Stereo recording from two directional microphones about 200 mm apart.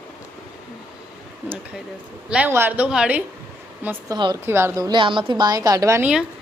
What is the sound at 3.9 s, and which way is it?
A woman's voice, 20° right (ahead or behind).